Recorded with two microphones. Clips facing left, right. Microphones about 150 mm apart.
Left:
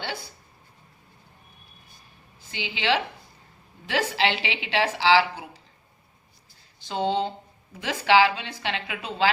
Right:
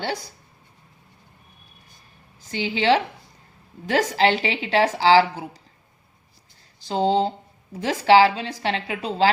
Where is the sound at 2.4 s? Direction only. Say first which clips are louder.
Right 7 dB; 40° right (ahead or behind).